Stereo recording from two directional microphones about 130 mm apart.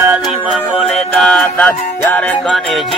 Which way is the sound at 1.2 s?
5° left (ahead or behind).